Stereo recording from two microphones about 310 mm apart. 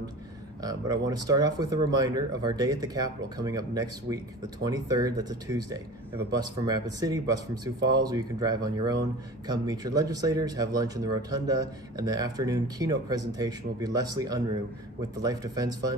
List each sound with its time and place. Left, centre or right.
0.6 s speech: centre